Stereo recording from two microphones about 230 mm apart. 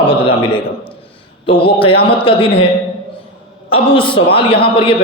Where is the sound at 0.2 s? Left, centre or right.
Left.